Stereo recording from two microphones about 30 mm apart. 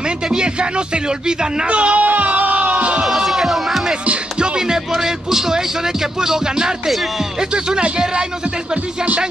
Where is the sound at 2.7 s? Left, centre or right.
Right.